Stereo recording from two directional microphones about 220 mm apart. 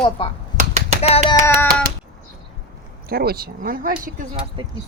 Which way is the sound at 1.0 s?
25° left (ahead or behind).